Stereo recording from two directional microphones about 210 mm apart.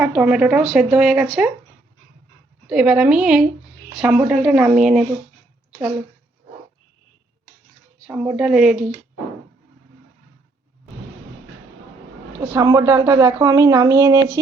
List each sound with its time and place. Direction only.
0.0 s speech: 5° right (ahead or behind)
2.6 s speech: 5° right (ahead or behind)
8.0 s speech: 5° right (ahead or behind)
12.5 s a woman's voice: 15° right (ahead or behind)